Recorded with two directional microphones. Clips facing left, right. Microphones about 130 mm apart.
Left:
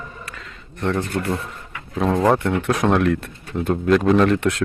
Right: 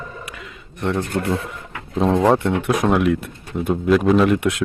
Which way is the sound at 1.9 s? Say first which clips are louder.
Right 2 dB; 20° right (ahead or behind).